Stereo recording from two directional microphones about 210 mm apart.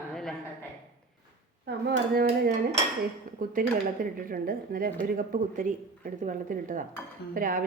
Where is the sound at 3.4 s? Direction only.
40° right (ahead or behind).